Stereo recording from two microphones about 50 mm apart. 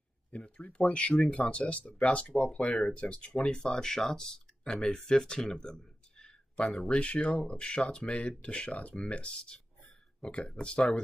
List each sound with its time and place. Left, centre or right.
0.3 s speech: left